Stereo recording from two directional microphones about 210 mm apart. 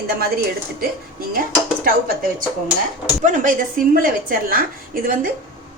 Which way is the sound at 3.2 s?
40° right (ahead or behind).